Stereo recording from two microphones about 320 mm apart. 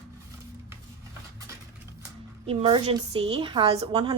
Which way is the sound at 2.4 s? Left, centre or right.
Centre.